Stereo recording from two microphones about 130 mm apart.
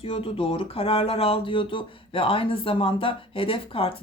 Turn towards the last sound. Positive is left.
turn(degrees=45)  # may be behind; listen again after turning